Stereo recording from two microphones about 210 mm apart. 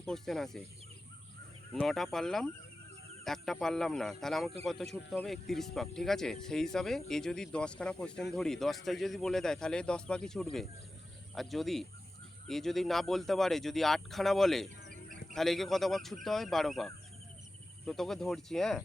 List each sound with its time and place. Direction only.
0.0 s speech: centre (ahead or behind)
1.7 s speech: centre (ahead or behind)